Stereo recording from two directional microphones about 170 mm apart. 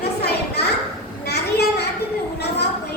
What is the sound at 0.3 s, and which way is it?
Children playing, 75° left (ahead or behind).